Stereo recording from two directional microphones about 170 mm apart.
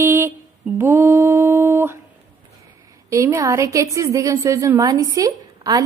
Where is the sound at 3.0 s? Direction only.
20° right (ahead or behind).